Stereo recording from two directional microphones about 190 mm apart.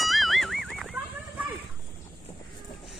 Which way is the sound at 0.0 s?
Centre (ahead or behind).